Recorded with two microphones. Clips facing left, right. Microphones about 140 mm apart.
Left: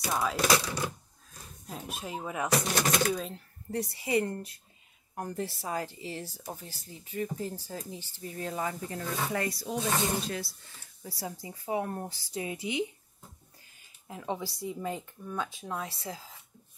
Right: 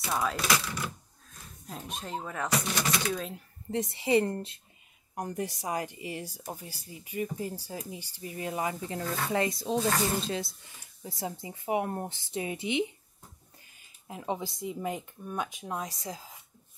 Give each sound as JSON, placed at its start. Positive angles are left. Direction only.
{"t": 0.0, "sound": "speech", "side_deg": 0}
{"t": 1.7, "sound": "speech", "side_deg": 5}
{"t": 2.7, "sound": "speech", "side_deg": 50}
{"t": 3.1, "sound": "speech", "side_deg": 0}
{"t": 3.3, "sound": "speech", "side_deg": -20}
{"t": 5.1, "sound": "speech", "side_deg": -15}
{"t": 9.8, "sound": "speech", "side_deg": 20}
{"t": 10.2, "sound": "speech", "side_deg": -20}
{"t": 14.0, "sound": "speech", "side_deg": -20}